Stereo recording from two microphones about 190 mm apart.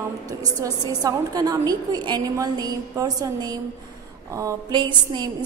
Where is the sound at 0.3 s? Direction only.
20° right (ahead or behind).